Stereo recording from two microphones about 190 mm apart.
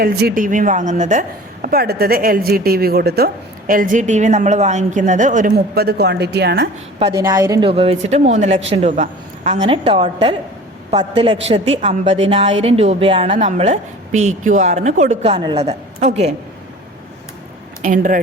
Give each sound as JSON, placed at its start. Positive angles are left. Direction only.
{"t": 0.0, "sound": "a woman's voice", "side_deg": -55}
{"t": 1.6, "sound": "a woman's voice", "side_deg": -55}
{"t": 7.0, "sound": "a woman's voice", "side_deg": -20}
{"t": 11.4, "sound": "a woman's voice", "side_deg": -30}
{"t": 17.8, "sound": "a woman's voice", "side_deg": -45}